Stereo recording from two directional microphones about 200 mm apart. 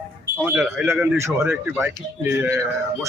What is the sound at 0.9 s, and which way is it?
Speech, 15° right (ahead or behind).